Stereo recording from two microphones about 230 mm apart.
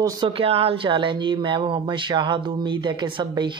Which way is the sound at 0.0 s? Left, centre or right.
Centre.